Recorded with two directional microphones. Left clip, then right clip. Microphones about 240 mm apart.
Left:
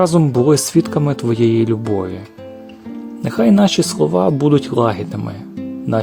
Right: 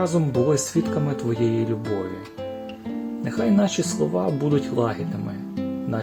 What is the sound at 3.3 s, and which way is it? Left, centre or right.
Speech, left.